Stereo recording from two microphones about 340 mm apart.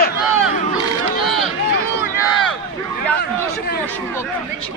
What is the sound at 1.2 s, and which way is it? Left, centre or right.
Run, centre.